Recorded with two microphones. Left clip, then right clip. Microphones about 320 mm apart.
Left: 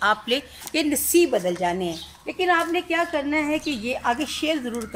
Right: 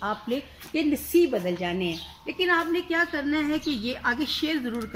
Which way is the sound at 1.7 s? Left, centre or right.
Left.